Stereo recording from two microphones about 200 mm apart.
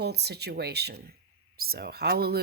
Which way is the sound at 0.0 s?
55° right (ahead or behind).